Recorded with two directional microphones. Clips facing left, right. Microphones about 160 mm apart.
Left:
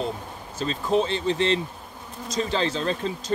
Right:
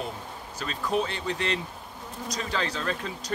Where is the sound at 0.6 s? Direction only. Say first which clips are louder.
Left 5 dB; 25° left (ahead or behind).